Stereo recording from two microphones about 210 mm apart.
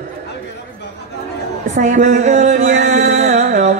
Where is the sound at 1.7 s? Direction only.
35° right (ahead or behind).